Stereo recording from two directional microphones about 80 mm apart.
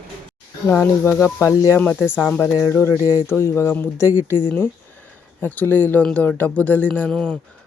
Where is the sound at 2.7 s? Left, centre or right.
Left.